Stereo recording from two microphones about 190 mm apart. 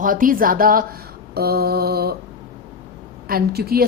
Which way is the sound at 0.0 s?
45° right (ahead or behind).